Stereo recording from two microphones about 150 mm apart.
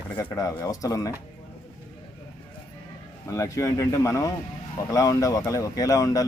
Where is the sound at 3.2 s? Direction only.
20° left (ahead or behind).